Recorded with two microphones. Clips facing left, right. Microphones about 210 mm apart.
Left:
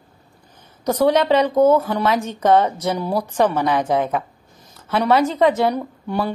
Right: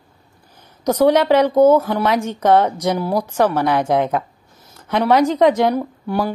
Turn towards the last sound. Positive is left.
turn(degrees=-5)  # may be behind; listen again after turning